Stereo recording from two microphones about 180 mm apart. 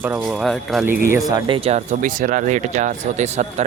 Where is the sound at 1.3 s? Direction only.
25° right (ahead or behind).